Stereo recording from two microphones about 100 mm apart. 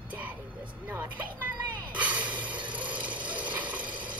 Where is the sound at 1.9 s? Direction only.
15° right (ahead or behind).